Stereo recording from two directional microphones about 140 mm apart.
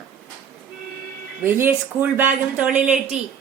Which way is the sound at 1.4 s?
15° right (ahead or behind).